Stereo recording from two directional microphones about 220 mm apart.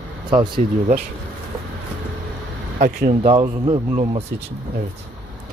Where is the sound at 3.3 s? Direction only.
15° right (ahead or behind).